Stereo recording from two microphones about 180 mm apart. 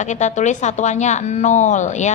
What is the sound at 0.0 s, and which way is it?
A woman's voice, 40° left (ahead or behind).